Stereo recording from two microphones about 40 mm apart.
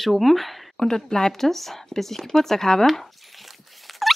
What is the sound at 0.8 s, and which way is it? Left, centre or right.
Speech, centre.